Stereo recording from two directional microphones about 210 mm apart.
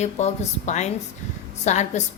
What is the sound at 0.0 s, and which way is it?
A woman's voice, 35° left (ahead or behind).